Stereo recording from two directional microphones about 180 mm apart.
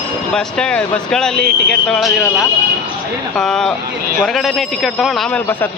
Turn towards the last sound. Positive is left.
turn(degrees=0)  # may be behind; listen again after turning